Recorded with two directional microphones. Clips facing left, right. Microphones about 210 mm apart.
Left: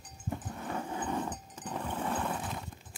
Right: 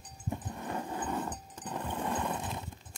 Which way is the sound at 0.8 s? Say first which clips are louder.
Left 2 dB; 10° left (ahead or behind).